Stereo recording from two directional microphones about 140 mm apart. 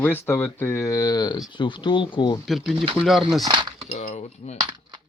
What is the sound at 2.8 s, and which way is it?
Speech, 40° right (ahead or behind).